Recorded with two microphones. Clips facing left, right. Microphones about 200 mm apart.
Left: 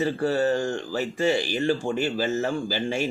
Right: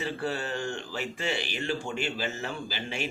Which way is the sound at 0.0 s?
40° left (ahead or behind).